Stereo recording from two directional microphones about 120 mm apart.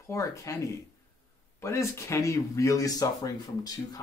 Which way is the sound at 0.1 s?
25° left (ahead or behind).